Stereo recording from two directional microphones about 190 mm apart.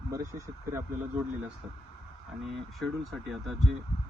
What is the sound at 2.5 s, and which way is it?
Speech, centre (ahead or behind).